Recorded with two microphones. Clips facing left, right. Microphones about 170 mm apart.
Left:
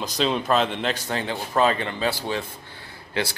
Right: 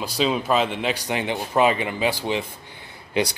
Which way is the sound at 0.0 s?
5° right (ahead or behind).